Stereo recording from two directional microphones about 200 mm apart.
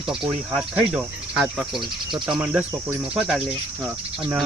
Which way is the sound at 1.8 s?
25° right (ahead or behind).